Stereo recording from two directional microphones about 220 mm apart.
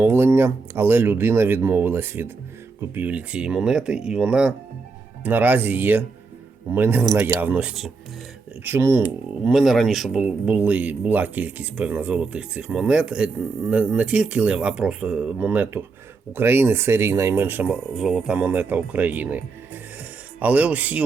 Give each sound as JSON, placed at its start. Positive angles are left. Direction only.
{"t": 0.0, "sound": "speech", "side_deg": -10}